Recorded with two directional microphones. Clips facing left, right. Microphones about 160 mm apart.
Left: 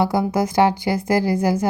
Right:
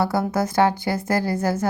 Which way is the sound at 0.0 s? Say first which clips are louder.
Left 2 dB; 20° left (ahead or behind).